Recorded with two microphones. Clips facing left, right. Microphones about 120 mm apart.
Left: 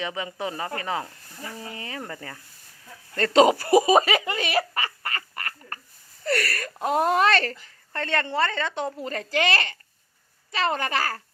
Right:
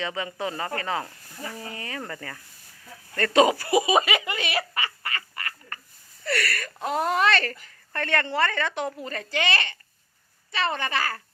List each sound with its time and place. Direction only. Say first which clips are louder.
0.0 s a woman's voice: even; 15° left (ahead or behind)
3.7 s a sound: left 4 dB; 40° left (ahead or behind)
6.2 s a woman's voice: left 2 dB; 40° left (ahead or behind)
6.7 s speech: left 4 dB; 5° left (ahead or behind)
7.2 s a woman's voice: left 2 dB; 40° left (ahead or behind)
7.9 s a woman's voice: even; 20° left (ahead or behind)
9.0 s a woman's voice: left 3 dB; 35° left (ahead or behind)